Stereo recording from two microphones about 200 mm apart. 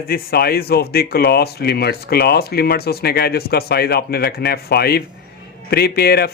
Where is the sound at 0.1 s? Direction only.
50° left (ahead or behind).